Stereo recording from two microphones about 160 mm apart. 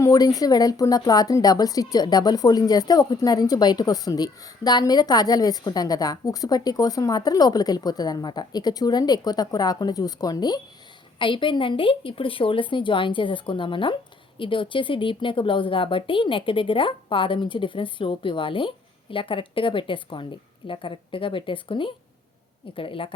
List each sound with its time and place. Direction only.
0.0 s a woman's voice: 20° left (ahead or behind)